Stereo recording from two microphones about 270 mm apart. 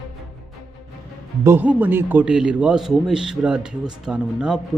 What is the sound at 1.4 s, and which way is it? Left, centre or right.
A man's voice, centre.